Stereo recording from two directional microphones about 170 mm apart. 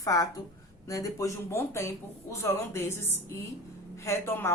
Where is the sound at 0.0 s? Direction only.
20° left (ahead or behind).